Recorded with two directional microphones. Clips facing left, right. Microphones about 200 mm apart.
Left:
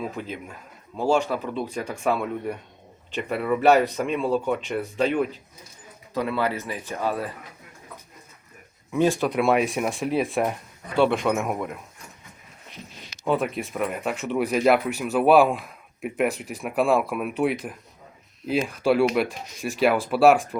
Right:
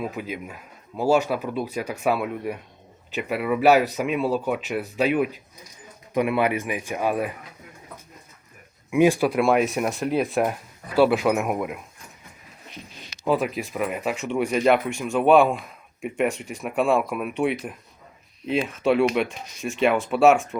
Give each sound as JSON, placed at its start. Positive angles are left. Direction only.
{"t": 0.0, "sound": "speech", "side_deg": -10}
{"t": 8.9, "sound": "speech", "side_deg": -10}
{"t": 9.3, "sound": "speech", "side_deg": 0}
{"t": 13.2, "sound": "speech", "side_deg": 0}